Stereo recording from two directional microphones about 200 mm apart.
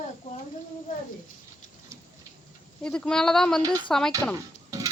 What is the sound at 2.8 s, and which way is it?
Speech, 5° left (ahead or behind).